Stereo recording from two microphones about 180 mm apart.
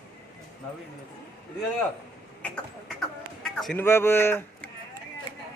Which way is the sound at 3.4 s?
Centre (ahead or behind).